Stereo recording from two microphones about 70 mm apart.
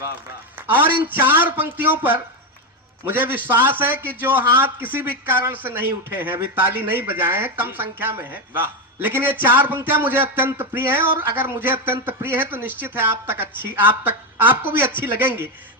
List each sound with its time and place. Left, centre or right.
0.7 s a man's voice: right